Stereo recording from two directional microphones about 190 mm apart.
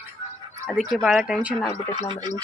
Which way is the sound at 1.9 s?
25° right (ahead or behind).